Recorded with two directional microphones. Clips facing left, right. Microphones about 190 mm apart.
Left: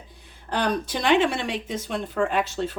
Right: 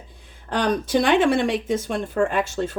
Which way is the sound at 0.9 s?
50° right (ahead or behind).